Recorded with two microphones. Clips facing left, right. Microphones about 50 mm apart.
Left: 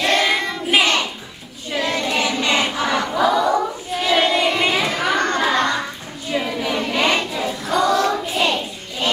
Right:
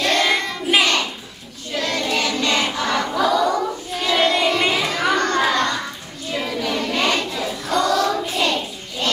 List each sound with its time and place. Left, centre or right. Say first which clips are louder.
0.0 s child singing: left 1 dB; centre
4.7 s a sound: even; centre
6.3 s child singing: left 2 dB; centre
8.1 s hands: left 1 dB; centre